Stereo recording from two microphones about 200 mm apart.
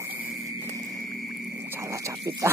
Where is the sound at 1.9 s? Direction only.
15° right (ahead or behind).